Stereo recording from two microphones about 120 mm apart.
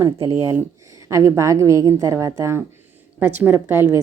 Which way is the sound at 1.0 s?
25° right (ahead or behind).